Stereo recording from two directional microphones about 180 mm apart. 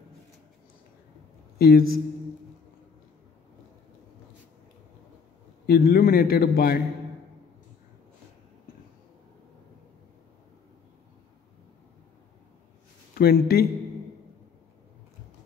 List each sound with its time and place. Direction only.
1.6 s a man's voice: 60° left (ahead or behind)
5.7 s a man's voice: 55° left (ahead or behind)
13.1 s speech: 55° left (ahead or behind)